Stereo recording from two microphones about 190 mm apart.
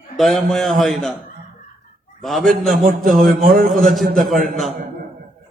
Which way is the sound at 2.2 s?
Centre (ahead or behind).